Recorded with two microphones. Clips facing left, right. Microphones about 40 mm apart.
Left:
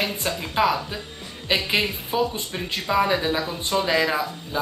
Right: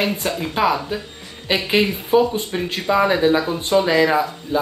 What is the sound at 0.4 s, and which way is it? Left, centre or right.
Speech, centre.